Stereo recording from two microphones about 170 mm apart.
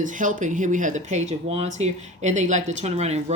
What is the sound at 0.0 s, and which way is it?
Speech, 50° right (ahead or behind).